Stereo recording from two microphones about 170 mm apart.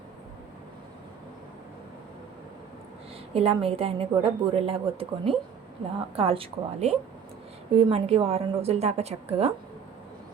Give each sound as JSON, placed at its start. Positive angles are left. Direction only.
{"t": 3.3, "sound": "a woman's voice", "side_deg": -35}